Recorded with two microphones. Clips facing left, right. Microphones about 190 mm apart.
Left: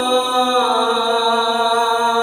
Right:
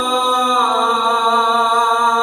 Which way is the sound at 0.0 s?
30° left (ahead or behind).